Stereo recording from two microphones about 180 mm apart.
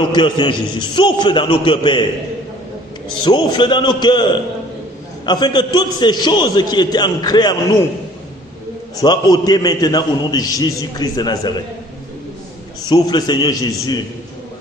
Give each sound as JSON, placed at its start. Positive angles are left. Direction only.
{"t": 0.1, "sound": "a man's voice", "side_deg": 25}
{"t": 3.3, "sound": "a man's voice", "side_deg": 25}
{"t": 5.2, "sound": "a man's voice", "side_deg": 25}
{"t": 9.0, "sound": "a man's voice", "side_deg": 25}
{"t": 12.9, "sound": "a man's voice", "side_deg": 25}